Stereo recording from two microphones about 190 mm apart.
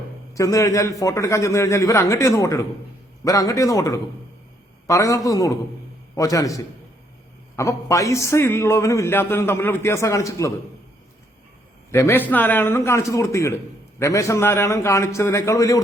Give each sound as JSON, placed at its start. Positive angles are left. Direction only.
{"t": 0.3, "sound": "a man's voice", "side_deg": 15}
{"t": 11.9, "sound": "a man's voice", "side_deg": 15}